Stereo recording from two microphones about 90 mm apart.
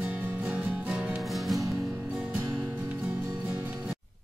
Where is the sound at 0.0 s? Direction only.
15° right (ahead or behind).